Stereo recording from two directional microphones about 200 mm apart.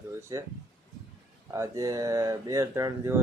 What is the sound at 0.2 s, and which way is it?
Speech, 15° right (ahead or behind).